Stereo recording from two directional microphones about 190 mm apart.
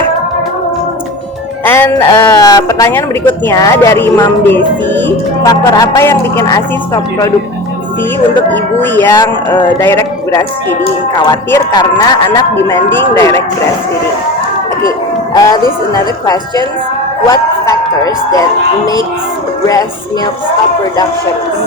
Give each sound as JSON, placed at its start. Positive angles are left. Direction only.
{"t": 1.6, "sound": "a man's voice", "side_deg": 10}
{"t": 8.5, "sound": "a man's voice", "side_deg": 10}
{"t": 14.8, "sound": "a sound", "side_deg": 20}
{"t": 16.2, "sound": "a man's voice", "side_deg": 20}